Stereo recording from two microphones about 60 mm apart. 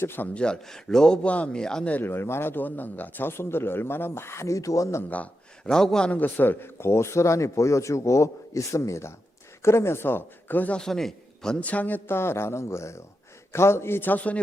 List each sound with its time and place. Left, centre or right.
0.0 s a man's voice: left
0.3 s a man's voice: centre
2.0 s a man's voice: left
5.0 s speech: left
5.7 s a man's voice: centre
6.1 s a man's voice: left
6.7 s a man's voice: left
10.8 s a man's voice: centre
11.6 s speech: left
12.0 s speech: left